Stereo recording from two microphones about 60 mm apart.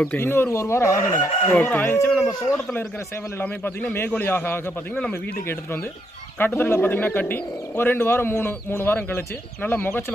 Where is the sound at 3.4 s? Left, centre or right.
Left.